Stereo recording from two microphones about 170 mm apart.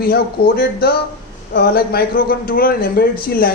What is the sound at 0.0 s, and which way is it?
Speech, 65° left (ahead or behind).